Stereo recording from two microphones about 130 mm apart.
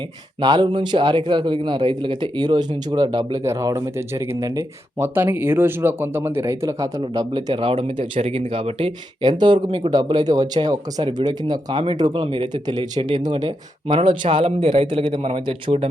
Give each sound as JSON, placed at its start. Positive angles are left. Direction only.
{"t": 0.4, "sound": "speech", "side_deg": -35}
{"t": 3.4, "sound": "speech", "side_deg": -25}